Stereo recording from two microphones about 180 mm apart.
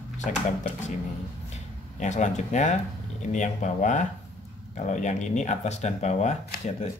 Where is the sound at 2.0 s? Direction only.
40° left (ahead or behind).